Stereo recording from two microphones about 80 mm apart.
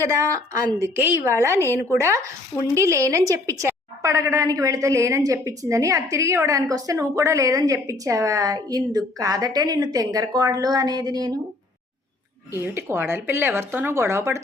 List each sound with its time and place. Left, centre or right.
0.0 s a woman's voice: right
0.9 s a woman's voice: right
1.3 s a woman's voice: right
12.5 s speech: right